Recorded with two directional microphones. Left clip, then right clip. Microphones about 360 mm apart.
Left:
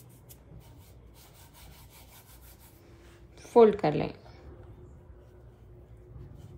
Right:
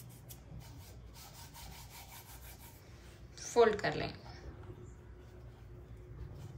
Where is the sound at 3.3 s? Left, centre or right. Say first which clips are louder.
Left 8 dB; centre.